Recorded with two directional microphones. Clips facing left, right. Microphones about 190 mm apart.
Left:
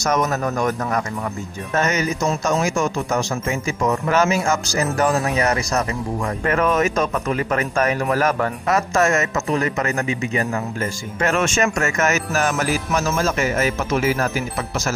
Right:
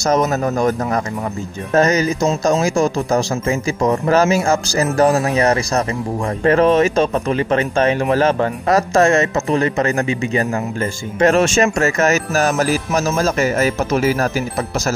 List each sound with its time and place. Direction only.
0.0 s speech: 30° right (ahead or behind)